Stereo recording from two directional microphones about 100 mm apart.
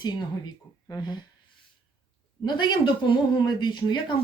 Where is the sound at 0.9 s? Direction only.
45° left (ahead or behind).